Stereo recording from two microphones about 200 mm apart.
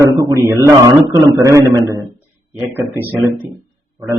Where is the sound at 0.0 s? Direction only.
15° right (ahead or behind).